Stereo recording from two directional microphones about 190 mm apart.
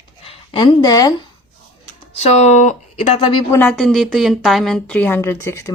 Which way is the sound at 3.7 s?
Centre (ahead or behind).